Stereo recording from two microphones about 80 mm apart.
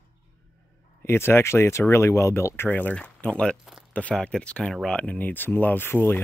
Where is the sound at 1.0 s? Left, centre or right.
Left.